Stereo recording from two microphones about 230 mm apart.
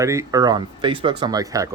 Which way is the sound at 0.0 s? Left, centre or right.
Centre.